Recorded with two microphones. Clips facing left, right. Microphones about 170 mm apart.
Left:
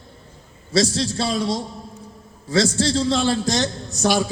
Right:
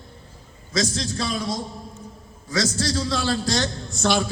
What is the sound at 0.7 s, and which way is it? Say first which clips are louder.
A man's voice: left 5 dB; 30° left (ahead or behind).